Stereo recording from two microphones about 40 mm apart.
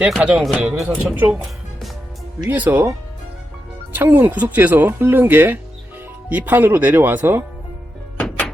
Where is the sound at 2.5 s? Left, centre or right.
Right.